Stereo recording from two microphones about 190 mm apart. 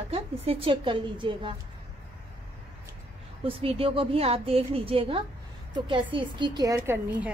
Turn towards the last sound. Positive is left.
turn(degrees=-10)  # may be behind; listen again after turning